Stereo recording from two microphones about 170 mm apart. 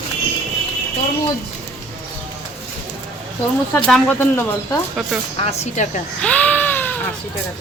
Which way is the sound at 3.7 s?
5° left (ahead or behind).